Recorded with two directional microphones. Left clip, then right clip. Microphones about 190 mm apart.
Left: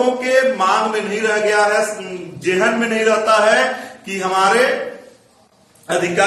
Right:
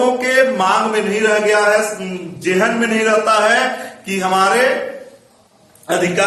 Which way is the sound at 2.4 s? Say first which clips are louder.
Right 1 dB; 20° right (ahead or behind).